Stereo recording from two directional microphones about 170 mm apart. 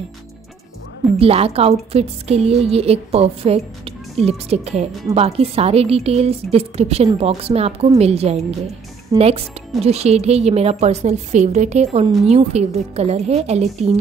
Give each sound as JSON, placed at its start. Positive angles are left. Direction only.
{"t": 1.2, "sound": "a woman's voice", "side_deg": -35}
{"t": 9.1, "sound": "speech", "side_deg": -25}
{"t": 9.8, "sound": "a woman's voice", "side_deg": -40}